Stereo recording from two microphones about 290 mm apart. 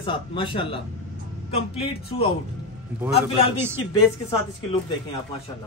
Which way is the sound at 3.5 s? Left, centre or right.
Centre.